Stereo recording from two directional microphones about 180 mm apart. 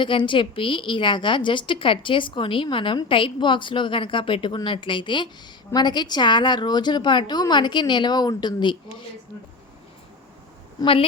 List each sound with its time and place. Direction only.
0.0 s a woman's voice: 25° left (ahead or behind)
10.8 s a woman's voice: 30° left (ahead or behind)